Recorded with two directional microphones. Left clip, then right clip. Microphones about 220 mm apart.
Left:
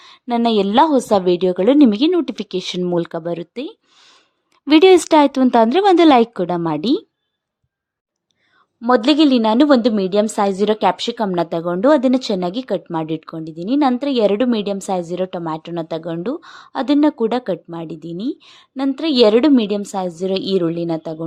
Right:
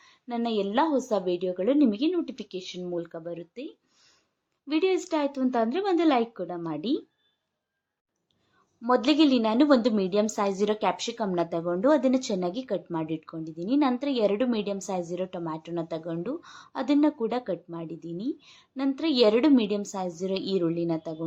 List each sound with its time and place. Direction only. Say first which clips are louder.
0.0 s a woman's voice: left 13 dB; 50° left (ahead or behind)
8.8 s a woman's voice: left 9 dB; 40° left (ahead or behind)